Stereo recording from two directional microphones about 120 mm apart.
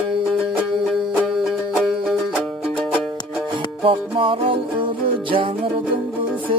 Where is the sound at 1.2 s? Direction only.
Centre (ahead or behind).